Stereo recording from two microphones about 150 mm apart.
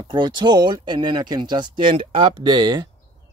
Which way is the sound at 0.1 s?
30° right (ahead or behind).